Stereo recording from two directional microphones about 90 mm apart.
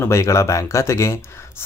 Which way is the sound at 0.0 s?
30° left (ahead or behind).